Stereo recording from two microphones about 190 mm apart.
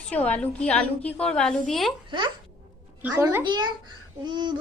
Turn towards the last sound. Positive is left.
turn(degrees=-25)  # may be behind; listen again after turning